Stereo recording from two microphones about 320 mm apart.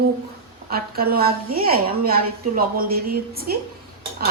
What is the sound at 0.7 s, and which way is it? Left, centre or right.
A woman's voice, right.